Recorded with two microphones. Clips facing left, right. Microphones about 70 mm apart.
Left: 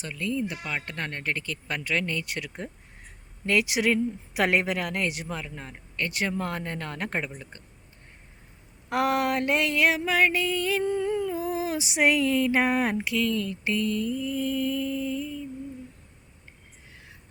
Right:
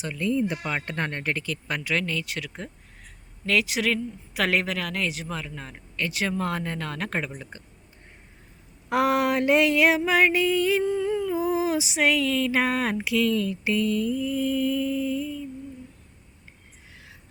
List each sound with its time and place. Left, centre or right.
0.2 s speech: right
1.3 s a sound: centre
2.0 s mantra: centre
3.4 s speech: centre
6.0 s mantra: centre
6.5 s speech: centre
8.9 s a sound: centre
10.8 s humming: centre
11.3 s a sound: centre
11.9 s speech: centre
12.6 s mantra: centre